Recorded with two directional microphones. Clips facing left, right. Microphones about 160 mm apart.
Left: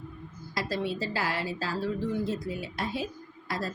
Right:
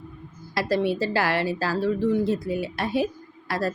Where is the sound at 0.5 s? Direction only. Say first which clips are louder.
Right 8 dB; 65° right (ahead or behind).